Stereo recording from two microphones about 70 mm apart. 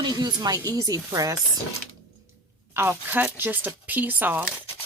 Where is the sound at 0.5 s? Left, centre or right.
Right.